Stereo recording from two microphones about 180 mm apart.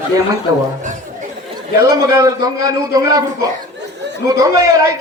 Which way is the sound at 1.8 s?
20° right (ahead or behind).